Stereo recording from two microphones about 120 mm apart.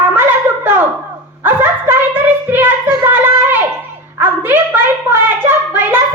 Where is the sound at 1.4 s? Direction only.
20° right (ahead or behind).